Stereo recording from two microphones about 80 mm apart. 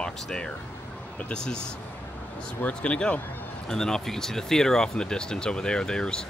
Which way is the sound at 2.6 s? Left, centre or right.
Centre.